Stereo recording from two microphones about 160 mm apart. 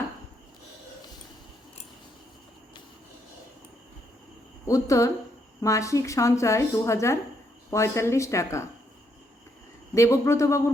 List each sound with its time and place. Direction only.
4.6 s a woman's voice: 20° left (ahead or behind)
9.9 s a woman's voice: 20° left (ahead or behind)